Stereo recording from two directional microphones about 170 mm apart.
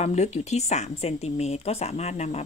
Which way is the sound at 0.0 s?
40° left (ahead or behind).